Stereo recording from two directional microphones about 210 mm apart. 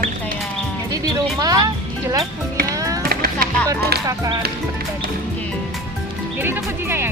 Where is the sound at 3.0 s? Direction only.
45° right (ahead or behind).